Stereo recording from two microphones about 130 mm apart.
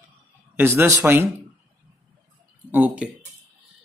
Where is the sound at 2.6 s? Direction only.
15° right (ahead or behind).